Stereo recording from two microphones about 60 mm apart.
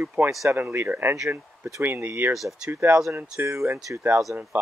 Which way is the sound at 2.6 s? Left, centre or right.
Right.